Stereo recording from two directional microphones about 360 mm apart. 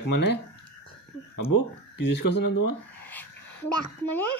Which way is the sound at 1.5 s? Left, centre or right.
Left.